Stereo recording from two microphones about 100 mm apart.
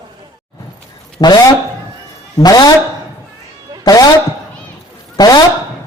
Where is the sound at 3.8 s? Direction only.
40° left (ahead or behind).